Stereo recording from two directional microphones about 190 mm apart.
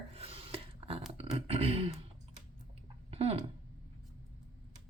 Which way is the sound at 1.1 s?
30° right (ahead or behind).